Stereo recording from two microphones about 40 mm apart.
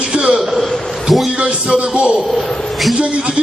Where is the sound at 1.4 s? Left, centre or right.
Right.